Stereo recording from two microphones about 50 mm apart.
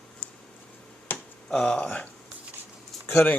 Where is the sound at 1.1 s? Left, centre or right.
Left.